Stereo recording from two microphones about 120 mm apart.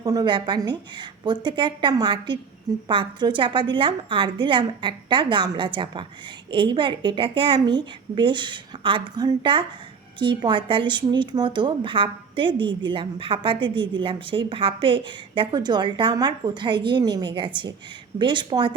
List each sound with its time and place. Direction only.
0.0 s a woman's voice: 30° right (ahead or behind)